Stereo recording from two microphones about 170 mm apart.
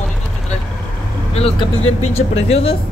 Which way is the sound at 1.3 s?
35° left (ahead or behind).